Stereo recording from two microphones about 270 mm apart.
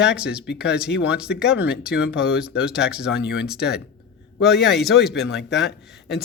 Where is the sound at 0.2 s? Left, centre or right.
Centre.